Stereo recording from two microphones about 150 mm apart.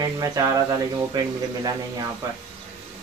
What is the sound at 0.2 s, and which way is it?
Speech, 25° right (ahead or behind).